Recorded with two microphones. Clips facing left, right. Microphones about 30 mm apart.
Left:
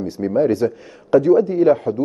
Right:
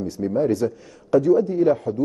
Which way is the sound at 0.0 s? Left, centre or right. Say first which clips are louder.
Left 4 dB; left.